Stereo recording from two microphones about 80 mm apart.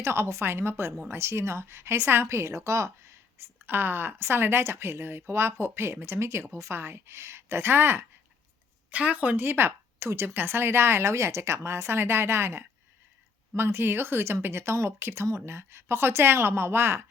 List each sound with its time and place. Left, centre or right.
0.0 s a woman's voice: right
8.9 s a woman's voice: centre